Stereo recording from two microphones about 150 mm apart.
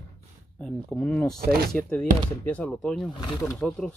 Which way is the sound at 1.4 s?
90° right.